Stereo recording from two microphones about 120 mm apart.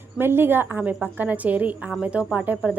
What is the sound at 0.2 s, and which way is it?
A woman's voice, 20° right (ahead or behind).